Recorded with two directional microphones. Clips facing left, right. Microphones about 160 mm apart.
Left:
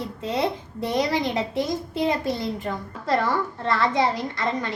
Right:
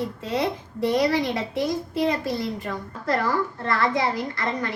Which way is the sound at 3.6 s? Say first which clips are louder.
Left 2 dB; 25° left (ahead or behind).